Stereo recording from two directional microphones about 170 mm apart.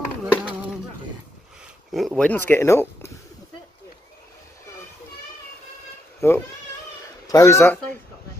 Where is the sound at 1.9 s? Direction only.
Centre (ahead or behind).